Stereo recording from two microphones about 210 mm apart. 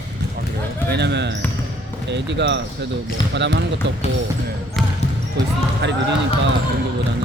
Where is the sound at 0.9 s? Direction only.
55° right (ahead or behind).